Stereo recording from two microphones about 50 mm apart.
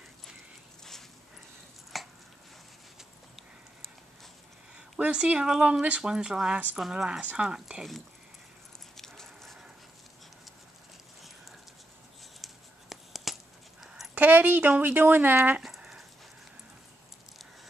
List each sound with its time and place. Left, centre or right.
1.9 s a sound: centre
4.7 s speech: right
8.9 s dog: centre
12.9 s a sound: centre
14.1 s a woman's voice: right
15.6 s dog: centre